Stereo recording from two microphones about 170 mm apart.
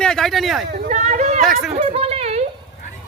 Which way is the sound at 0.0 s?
5° left (ahead or behind).